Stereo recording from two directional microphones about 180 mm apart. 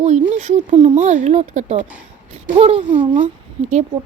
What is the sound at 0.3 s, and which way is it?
A woman's voice, 40° right (ahead or behind).